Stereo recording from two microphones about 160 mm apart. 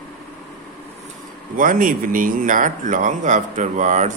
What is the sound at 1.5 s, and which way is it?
Speech, 60° right (ahead or behind).